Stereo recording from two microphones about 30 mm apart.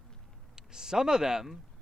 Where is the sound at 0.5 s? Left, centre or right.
Right.